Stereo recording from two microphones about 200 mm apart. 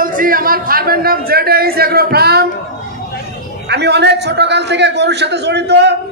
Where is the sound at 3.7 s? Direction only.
60° right (ahead or behind).